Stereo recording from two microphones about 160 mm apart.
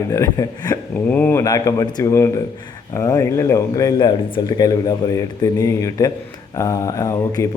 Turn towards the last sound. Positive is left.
turn(degrees=20)  # may be behind; listen again after turning